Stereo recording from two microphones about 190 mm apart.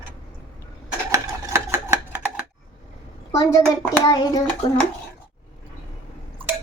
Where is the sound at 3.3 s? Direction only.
20° left (ahead or behind).